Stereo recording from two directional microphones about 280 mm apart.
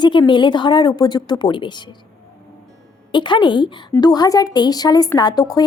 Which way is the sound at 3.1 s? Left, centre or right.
Centre.